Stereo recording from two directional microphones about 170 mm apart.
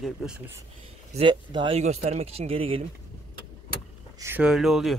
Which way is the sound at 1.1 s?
30° right (ahead or behind).